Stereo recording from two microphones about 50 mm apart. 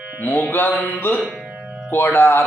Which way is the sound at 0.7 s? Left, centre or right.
Left.